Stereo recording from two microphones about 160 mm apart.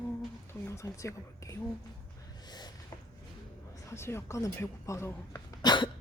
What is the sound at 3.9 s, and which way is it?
Speech, 15° left (ahead or behind).